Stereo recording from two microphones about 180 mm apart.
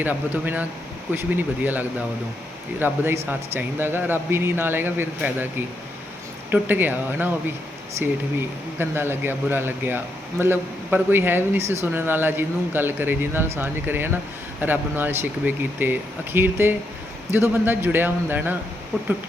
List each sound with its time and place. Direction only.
0.0 s speech: 10° right (ahead or behind)